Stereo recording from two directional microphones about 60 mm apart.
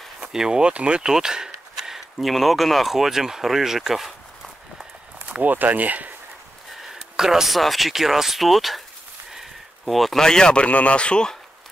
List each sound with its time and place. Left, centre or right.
0.3 s speech: centre
5.3 s speech: right
6.7 s speech: centre